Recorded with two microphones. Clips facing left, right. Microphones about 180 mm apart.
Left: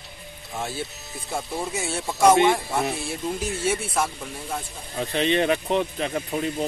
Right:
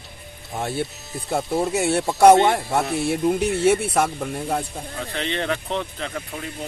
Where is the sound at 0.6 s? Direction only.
60° right (ahead or behind).